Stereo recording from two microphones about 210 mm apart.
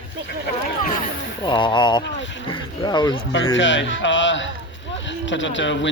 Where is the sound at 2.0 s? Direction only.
60° left (ahead or behind).